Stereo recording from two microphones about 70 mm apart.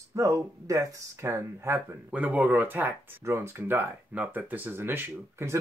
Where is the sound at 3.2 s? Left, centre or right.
Right.